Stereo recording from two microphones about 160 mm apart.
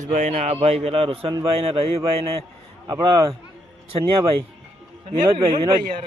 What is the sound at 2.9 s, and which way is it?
Speech, 25° right (ahead or behind).